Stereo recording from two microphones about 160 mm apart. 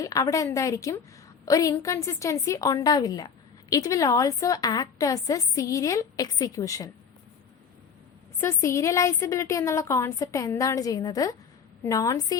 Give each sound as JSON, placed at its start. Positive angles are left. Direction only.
{"t": 0.0, "sound": "a woman's voice", "side_deg": 20}
{"t": 8.4, "sound": "a woman's voice", "side_deg": 15}